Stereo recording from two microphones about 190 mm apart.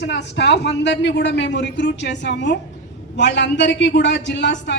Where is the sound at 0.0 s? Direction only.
65° left (ahead or behind).